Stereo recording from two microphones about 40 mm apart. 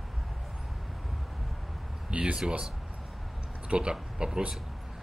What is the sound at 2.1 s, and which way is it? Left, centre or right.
A man's voice, right.